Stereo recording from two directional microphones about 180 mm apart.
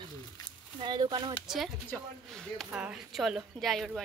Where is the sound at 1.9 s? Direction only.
Centre (ahead or behind).